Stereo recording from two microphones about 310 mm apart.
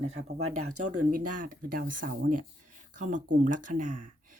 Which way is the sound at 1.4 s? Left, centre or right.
Right.